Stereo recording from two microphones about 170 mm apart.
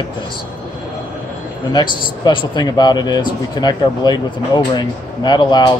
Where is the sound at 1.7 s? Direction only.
25° left (ahead or behind).